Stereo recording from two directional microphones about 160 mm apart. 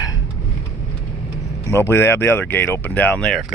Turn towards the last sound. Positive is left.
turn(degrees=5)  # may be behind; listen again after turning